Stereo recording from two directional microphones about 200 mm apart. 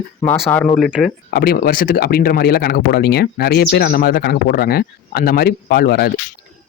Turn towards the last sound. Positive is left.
turn(degrees=50)  # may be behind; listen again after turning